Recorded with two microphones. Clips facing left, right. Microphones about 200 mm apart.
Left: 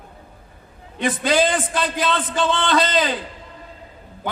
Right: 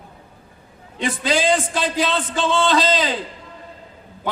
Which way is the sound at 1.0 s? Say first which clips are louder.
Left 2 dB; 50° left (ahead or behind).